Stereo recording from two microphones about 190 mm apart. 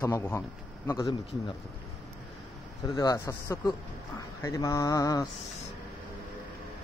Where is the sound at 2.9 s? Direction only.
20° left (ahead or behind).